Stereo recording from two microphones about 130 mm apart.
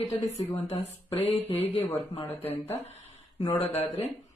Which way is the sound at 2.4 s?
15° left (ahead or behind).